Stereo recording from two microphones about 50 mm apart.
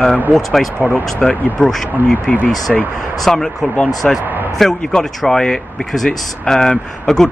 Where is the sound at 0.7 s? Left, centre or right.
Right.